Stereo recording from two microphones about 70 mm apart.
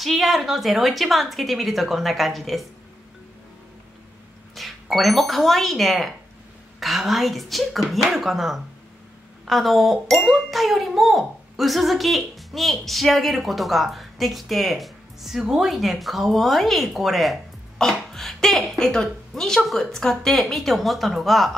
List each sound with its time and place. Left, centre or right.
0.0 s a child's voice: centre
4.6 s a child's voice: centre